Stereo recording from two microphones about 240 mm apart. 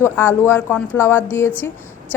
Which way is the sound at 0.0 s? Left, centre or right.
Centre.